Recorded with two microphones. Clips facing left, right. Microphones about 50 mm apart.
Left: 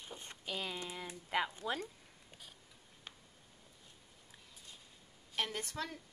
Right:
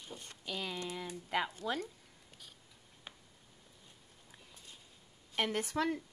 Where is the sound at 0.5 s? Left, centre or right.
Centre.